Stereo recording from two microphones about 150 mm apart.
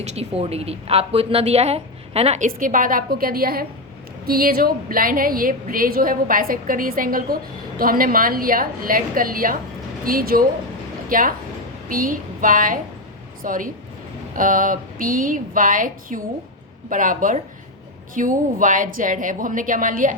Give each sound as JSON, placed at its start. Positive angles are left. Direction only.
{"t": 0.0, "sound": "a woman's voice", "side_deg": -45}